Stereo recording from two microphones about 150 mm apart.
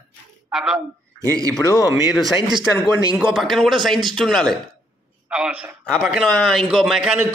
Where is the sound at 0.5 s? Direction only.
5° right (ahead or behind).